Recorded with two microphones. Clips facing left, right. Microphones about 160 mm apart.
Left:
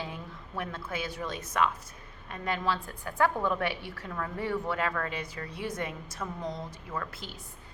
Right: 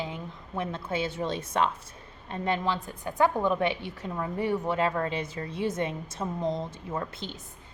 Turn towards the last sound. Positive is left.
turn(degrees=-25)  # may be behind; listen again after turning